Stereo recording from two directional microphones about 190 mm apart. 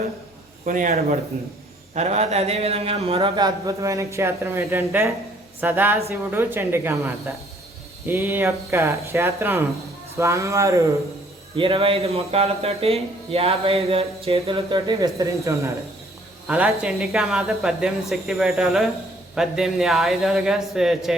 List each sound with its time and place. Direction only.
0.6 s speech: 45° right (ahead or behind); by 10.8 s 15° right (ahead or behind)
11.5 s speech: 30° right (ahead or behind); by 21.2 s centre (ahead or behind)